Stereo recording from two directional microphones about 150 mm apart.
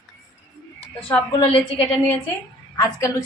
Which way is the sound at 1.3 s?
35° left (ahead or behind).